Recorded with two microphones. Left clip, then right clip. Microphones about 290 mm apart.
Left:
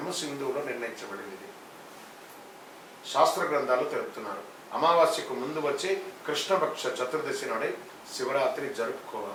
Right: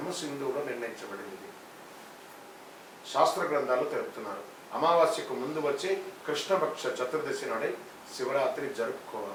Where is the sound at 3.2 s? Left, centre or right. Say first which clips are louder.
Left 1 dB; centre.